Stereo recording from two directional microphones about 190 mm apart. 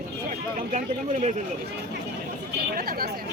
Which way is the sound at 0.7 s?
40° right (ahead or behind).